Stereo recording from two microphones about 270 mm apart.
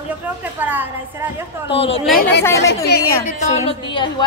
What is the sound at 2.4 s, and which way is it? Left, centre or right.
A woman's voice, centre.